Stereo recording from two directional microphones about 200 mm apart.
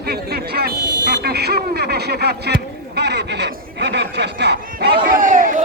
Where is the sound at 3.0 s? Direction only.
55° right (ahead or behind).